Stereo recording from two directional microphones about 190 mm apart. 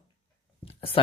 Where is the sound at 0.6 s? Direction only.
30° left (ahead or behind).